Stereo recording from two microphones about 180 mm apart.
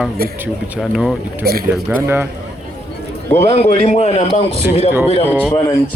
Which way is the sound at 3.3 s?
35° left (ahead or behind).